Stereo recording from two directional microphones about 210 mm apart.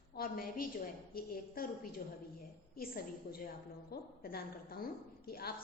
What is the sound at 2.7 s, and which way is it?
Speech, 45° left (ahead or behind).